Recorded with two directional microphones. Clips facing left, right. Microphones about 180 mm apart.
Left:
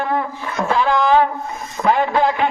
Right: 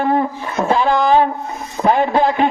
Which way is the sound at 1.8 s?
35° right (ahead or behind).